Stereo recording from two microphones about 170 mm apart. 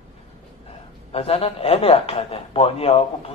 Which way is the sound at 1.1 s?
35° left (ahead or behind).